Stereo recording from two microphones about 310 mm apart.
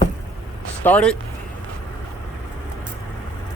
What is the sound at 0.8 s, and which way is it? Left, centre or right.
Speech, centre.